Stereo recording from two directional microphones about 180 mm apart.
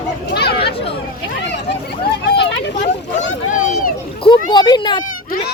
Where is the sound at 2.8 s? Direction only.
45° left (ahead or behind).